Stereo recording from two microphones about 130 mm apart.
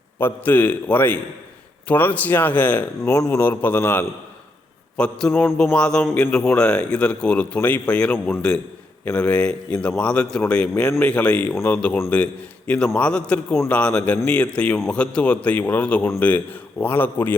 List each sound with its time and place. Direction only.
0.2 s a man's voice: 15° left (ahead or behind)
3.0 s a man's voice: 25° left (ahead or behind); by 5.3 s 5° left (ahead or behind)
5.3 s a man's voice: 20° left (ahead or behind)